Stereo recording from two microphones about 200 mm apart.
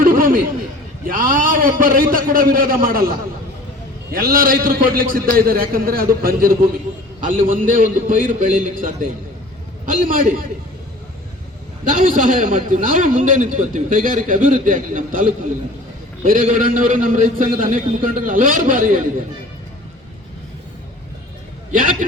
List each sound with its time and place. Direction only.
0.0 s a sound: 45° right (ahead or behind)
1.0 s a man's voice: 45° right (ahead or behind)
11.9 s a man's voice: 45° right (ahead or behind)
21.7 s a man's voice: 45° right (ahead or behind)